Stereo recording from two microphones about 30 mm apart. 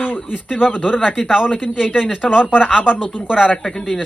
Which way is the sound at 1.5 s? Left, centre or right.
Left.